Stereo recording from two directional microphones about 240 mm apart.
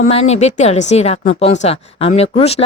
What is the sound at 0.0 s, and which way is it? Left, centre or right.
A woman's voice, left.